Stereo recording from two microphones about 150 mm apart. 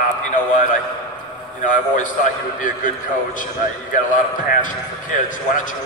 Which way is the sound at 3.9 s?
60° left (ahead or behind).